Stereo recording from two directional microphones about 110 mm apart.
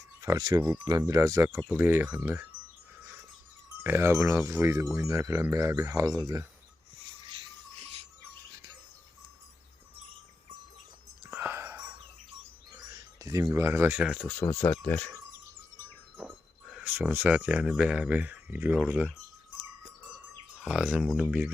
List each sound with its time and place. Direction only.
0.2 s speech: 35° right (ahead or behind)
1.7 s speech: 20° right (ahead or behind)
3.8 s speech: 20° right (ahead or behind)
11.3 s a sound: 20° right (ahead or behind)
13.2 s speech: 30° right (ahead or behind)
14.0 s speech: centre (ahead or behind)
14.3 s speech: 15° left (ahead or behind)
16.8 s speech: 10° right (ahead or behind)
20.6 s speech: 10° right (ahead or behind)